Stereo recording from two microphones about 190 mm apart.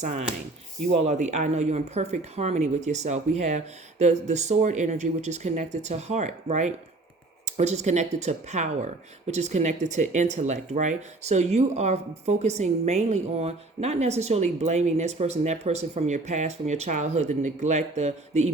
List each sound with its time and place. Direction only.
0.0 s speech: 40° right (ahead or behind)